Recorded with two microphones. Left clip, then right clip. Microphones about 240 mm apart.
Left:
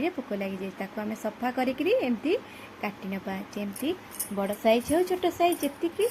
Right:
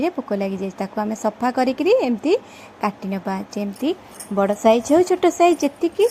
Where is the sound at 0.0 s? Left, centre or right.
Right.